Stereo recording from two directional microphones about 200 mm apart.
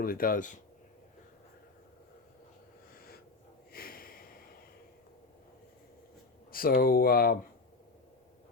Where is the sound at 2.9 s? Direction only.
50° left (ahead or behind).